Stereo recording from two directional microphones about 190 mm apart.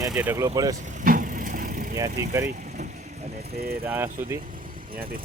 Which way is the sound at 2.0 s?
15° right (ahead or behind).